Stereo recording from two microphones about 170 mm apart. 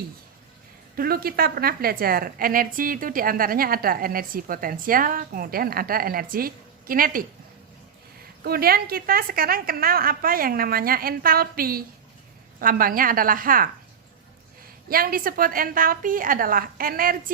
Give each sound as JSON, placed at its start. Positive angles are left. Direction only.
{"t": 0.9, "sound": "a woman's voice", "side_deg": -60}
{"t": 8.4, "sound": "a woman's voice", "side_deg": -65}
{"t": 14.8, "sound": "a woman's voice", "side_deg": -60}